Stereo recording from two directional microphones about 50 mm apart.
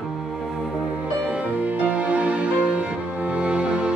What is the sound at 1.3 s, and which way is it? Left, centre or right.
Music, right.